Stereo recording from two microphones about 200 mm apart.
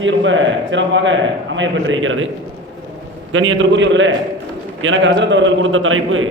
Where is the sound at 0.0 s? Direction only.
70° right (ahead or behind).